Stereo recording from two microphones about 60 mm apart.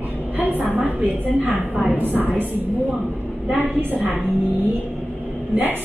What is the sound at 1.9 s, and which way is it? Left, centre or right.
Speech, right.